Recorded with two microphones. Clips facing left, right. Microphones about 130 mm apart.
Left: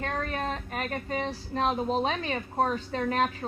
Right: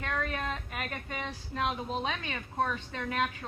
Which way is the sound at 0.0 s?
35° left (ahead or behind).